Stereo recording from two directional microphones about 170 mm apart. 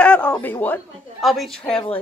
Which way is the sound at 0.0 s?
5° left (ahead or behind).